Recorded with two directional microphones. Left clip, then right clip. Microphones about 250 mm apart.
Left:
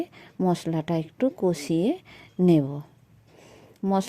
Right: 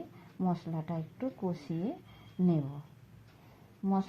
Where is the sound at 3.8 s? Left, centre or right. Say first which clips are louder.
Left 9 dB; left.